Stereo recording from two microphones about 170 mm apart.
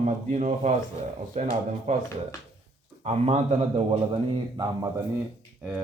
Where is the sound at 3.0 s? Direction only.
40° right (ahead or behind).